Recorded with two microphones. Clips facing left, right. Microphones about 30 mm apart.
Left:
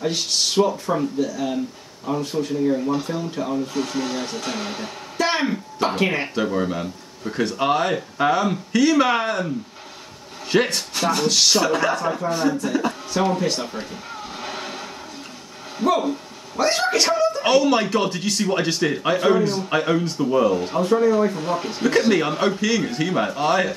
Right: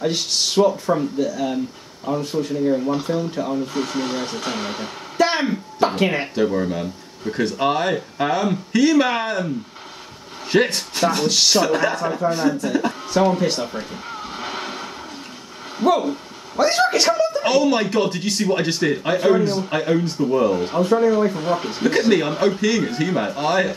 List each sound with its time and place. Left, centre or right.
0.0 s speech: centre
5.4 s speech: centre
7.2 s speech: centre
10.5 s speech: centre
14.0 s music: centre
16.1 s a sound: centre
17.5 s speech: centre
20.2 s speech: centre
20.5 s speech: centre